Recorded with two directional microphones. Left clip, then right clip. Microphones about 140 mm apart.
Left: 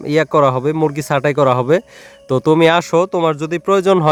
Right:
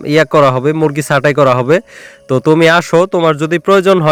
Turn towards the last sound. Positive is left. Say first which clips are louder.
# right 4 dB
turn(degrees=-15)  # may be behind; listen again after turning